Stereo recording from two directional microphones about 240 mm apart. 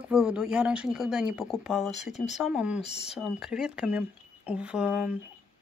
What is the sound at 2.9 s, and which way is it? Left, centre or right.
Speech, left.